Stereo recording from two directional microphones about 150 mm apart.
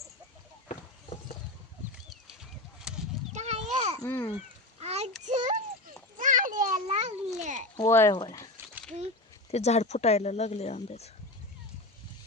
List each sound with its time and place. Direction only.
0.7 s horse: 50° left (ahead or behind)
2.0 s a sound: 5° right (ahead or behind)
3.3 s a sound: 50° right (ahead or behind)
4.0 s babbling: 15° left (ahead or behind)
4.8 s a sound: 45° right (ahead or behind)
6.1 s children playing: 60° right (ahead or behind)
6.8 s cat: 50° right (ahead or behind)
7.8 s speech: 15° left (ahead or behind)
9.5 s speech: 45° left (ahead or behind)